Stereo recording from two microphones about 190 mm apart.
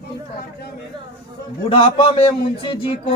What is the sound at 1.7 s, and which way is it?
A man's voice, 30° left (ahead or behind).